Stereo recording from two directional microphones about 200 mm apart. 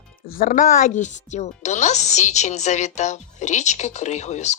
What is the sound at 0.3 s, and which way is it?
Speech, 45° left (ahead or behind).